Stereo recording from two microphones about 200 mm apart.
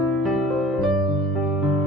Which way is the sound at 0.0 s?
Centre (ahead or behind).